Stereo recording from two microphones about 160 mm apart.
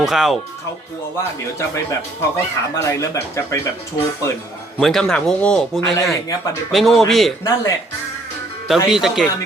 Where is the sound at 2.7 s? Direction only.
20° left (ahead or behind).